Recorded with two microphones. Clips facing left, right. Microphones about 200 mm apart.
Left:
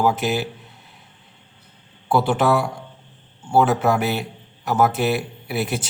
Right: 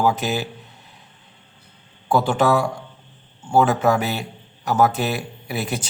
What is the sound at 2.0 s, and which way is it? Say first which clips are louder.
Speech: even; 5° left (ahead or behind).